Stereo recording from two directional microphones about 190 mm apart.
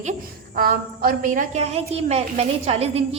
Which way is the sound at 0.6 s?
50° right (ahead or behind).